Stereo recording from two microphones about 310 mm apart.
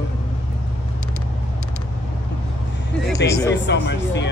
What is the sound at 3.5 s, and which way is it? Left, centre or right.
Speech, left.